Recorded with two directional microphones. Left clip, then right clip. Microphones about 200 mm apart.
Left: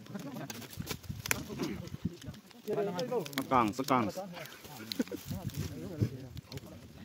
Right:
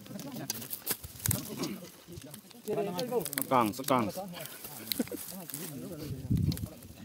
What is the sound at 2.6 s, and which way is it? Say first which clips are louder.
Speech: right 1 dB; 20° right (ahead or behind).